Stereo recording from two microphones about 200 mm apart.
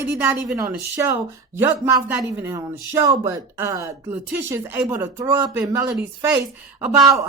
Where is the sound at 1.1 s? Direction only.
10° right (ahead or behind).